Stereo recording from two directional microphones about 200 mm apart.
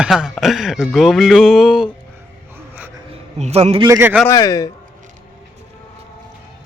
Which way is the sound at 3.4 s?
30° right (ahead or behind).